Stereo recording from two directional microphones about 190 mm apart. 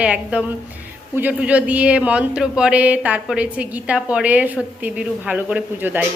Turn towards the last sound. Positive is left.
turn(degrees=-10)  # may be behind; listen again after turning